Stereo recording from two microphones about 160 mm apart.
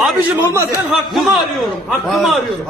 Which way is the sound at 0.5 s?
15° right (ahead or behind).